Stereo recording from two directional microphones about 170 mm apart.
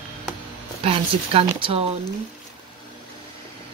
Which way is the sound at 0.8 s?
35° right (ahead or behind).